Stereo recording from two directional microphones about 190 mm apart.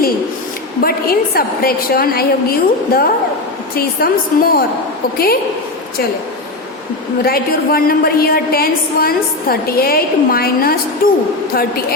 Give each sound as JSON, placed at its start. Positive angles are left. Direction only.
{"t": 0.8, "sound": "a woman's voice", "side_deg": 50}
{"t": 7.3, "sound": "a woman's voice", "side_deg": 50}